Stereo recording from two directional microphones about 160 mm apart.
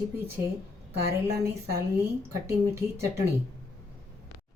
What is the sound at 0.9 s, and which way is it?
Speech, 80° right.